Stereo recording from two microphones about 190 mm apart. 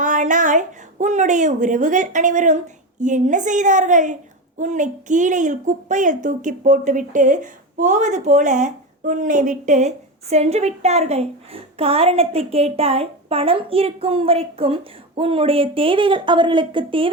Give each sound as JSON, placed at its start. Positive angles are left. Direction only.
{"t": 0.0, "sound": "a woman's voice", "side_deg": -40}